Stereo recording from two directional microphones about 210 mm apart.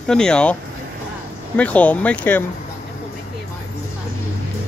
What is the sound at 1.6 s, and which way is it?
Speech, 5° left (ahead or behind).